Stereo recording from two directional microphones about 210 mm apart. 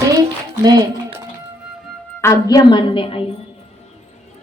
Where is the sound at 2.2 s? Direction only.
15° left (ahead or behind).